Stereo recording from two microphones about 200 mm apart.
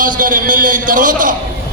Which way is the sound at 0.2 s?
40° right (ahead or behind).